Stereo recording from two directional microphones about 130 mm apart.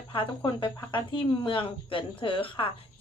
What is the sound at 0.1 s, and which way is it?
Speech, 40° left (ahead or behind).